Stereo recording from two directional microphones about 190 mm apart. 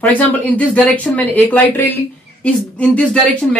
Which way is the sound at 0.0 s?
10° left (ahead or behind).